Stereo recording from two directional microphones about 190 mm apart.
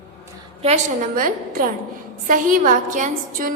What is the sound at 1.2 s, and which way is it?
A woman's voice, 45° right (ahead or behind).